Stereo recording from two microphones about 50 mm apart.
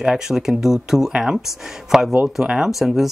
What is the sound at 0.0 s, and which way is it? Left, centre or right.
Speech, centre.